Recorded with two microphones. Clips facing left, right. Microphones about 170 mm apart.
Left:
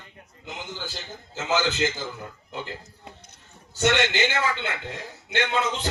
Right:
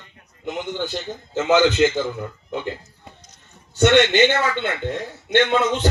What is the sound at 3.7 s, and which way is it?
A man's voice, 65° right (ahead or behind).